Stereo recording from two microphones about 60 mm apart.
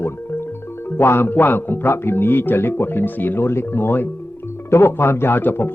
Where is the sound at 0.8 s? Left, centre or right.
Left.